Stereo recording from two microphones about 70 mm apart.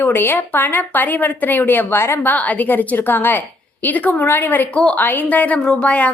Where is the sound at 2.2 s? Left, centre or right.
Left.